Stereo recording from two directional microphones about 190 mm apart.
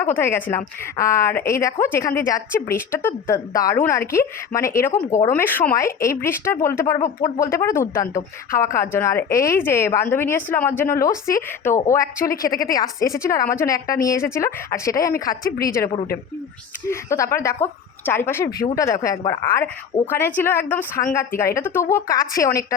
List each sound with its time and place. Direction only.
0.0 s a woman's voice: 10° left (ahead or behind)
12.2 s speech: 50° left (ahead or behind)
12.7 s a woman's voice: 20° left (ahead or behind)
16.9 s a woman's voice: 15° left (ahead or behind)